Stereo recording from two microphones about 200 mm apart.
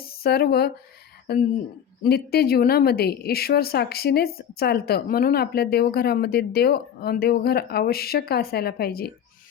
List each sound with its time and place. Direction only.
0.2 s a woman's voice: 50° left (ahead or behind)